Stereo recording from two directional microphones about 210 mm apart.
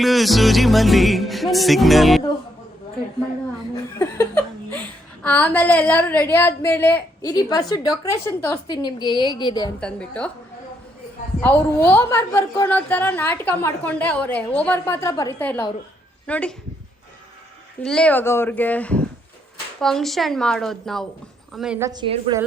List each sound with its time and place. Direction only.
0.0 s music: centre (ahead or behind)
3.9 s a woman's voice: 10° left (ahead or behind)
9.8 s music: 5° left (ahead or behind)
11.3 s a woman's voice: 10° left (ahead or behind)
16.2 s music: 5° left (ahead or behind)
17.8 s a woman's voice: 5° left (ahead or behind)
19.8 s music: centre (ahead or behind)
21.8 s a woman's voice: 20° right (ahead or behind)